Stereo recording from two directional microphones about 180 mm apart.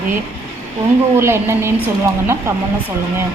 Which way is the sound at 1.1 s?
15° right (ahead or behind).